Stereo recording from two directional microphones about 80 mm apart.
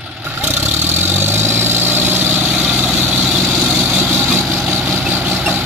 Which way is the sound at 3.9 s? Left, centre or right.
Right.